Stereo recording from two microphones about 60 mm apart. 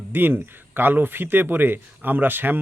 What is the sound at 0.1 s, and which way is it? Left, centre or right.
Speech, right.